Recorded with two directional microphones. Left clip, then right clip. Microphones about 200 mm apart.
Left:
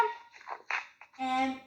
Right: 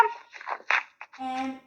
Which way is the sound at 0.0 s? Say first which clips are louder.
Right 7 dB; 45° right (ahead or behind).